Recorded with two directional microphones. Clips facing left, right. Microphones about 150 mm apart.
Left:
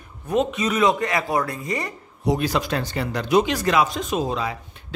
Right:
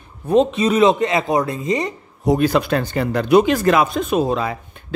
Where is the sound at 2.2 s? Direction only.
50° right (ahead or behind).